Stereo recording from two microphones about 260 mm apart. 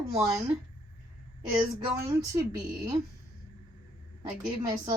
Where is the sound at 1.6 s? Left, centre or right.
Centre.